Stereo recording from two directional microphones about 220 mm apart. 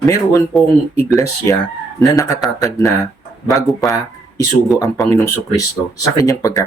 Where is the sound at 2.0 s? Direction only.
15° left (ahead or behind).